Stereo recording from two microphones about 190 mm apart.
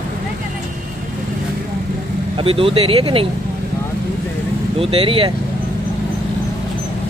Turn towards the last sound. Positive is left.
turn(degrees=-30)  # may be behind; listen again after turning